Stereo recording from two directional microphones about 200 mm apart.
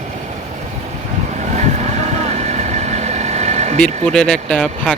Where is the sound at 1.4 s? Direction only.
35° right (ahead or behind).